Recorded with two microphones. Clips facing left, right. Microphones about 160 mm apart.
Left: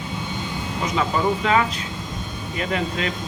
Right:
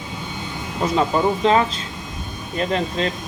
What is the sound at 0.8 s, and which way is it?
Speech, 30° right (ahead or behind).